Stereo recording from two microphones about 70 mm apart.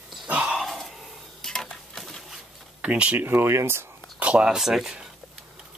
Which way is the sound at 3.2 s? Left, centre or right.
Right.